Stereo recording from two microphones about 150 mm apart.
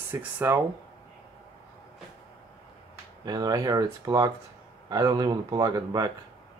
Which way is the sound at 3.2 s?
25° right (ahead or behind).